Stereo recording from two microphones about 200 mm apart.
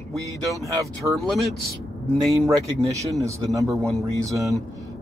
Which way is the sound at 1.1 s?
Centre (ahead or behind).